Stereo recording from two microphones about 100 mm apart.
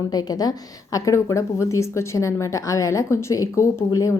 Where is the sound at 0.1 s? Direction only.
40° left (ahead or behind).